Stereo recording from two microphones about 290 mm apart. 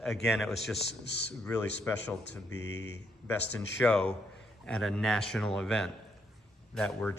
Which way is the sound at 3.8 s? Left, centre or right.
Centre.